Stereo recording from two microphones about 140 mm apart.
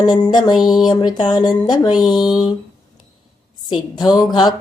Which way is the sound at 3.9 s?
30° left (ahead or behind).